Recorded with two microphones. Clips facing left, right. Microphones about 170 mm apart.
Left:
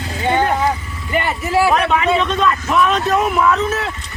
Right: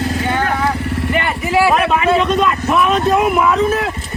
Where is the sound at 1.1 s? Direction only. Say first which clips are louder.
Left 1 dB; centre (ahead or behind).